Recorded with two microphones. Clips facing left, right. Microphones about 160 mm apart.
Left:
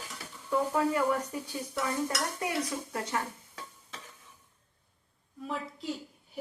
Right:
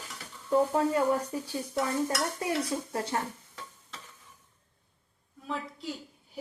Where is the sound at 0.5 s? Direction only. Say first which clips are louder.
Right 3 dB; 35° right (ahead or behind).